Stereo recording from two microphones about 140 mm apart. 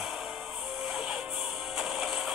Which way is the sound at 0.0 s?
5° right (ahead or behind).